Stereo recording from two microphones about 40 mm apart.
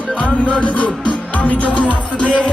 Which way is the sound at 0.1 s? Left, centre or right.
Left.